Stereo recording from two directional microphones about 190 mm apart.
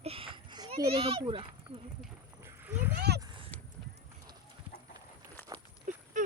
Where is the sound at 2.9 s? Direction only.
60° right (ahead or behind).